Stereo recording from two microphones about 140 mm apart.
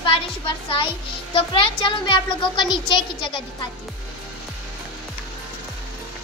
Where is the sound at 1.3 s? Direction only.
35° left (ahead or behind).